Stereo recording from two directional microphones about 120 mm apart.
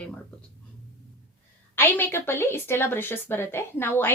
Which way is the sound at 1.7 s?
15° left (ahead or behind).